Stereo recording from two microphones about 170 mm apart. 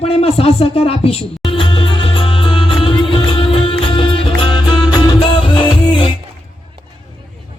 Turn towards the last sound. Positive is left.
turn(degrees=30)  # may be behind; listen again after turning